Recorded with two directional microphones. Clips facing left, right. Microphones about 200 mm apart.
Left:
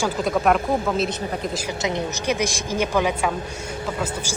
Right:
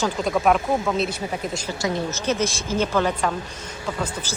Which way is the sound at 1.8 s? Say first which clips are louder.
Right 1 dB; 15° left (ahead or behind).